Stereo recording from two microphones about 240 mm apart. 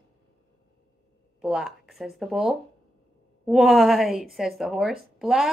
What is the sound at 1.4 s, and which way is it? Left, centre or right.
Speech, centre.